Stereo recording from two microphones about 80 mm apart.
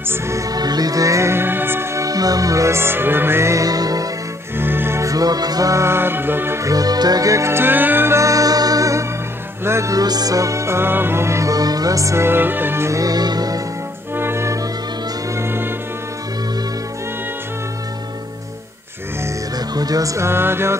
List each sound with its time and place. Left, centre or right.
0.1 s music: right
2.0 s music: right
3.6 s music: right
4.6 s music: right
5.0 s music: right
6.6 s music: right
8.2 s music: right
9.9 s music: right
13.0 s music: right
14.1 s music: right
19.7 s music: right
20.2 s music: right